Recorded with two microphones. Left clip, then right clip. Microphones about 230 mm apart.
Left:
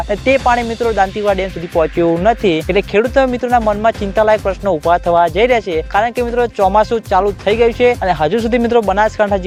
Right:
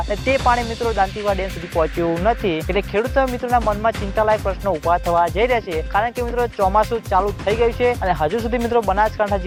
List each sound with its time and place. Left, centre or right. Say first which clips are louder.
0.1 s speech: left 5 dB; left